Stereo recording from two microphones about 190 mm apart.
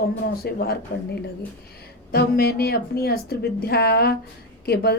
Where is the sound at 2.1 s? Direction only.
55° left (ahead or behind).